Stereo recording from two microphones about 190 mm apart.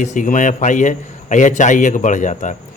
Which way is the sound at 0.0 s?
40° left (ahead or behind).